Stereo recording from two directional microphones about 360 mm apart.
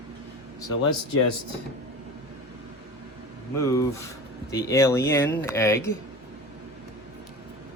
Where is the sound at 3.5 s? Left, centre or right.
Centre.